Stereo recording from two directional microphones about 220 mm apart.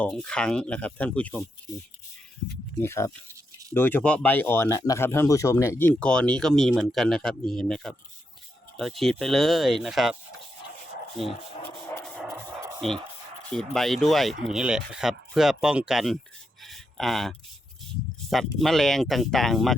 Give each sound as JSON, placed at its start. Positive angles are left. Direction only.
{"t": 0.0, "sound": "speech", "side_deg": 5}
{"t": 2.8, "sound": "speech", "side_deg": 10}
{"t": 11.2, "sound": "speech", "side_deg": 0}
{"t": 12.0, "sound": "a sound", "side_deg": 0}
{"t": 13.5, "sound": "speech", "side_deg": 0}
{"t": 16.6, "sound": "a sound", "side_deg": 0}
{"t": 18.6, "sound": "speech", "side_deg": 0}